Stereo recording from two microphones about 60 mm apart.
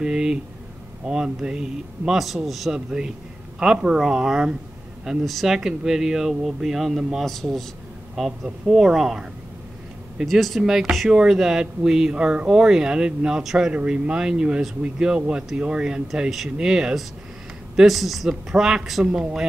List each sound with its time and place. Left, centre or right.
0.0 s speech: centre
2.7 s speech: centre
5.2 s speech: centre
10.2 s speech: centre